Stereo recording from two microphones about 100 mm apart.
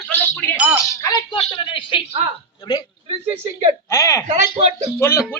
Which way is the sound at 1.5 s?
65° left (ahead or behind).